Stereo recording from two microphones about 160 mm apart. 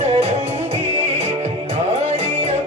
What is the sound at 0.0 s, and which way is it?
Music, 40° right (ahead or behind).